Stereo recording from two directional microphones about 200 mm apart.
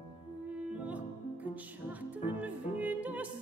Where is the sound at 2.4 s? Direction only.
5° right (ahead or behind).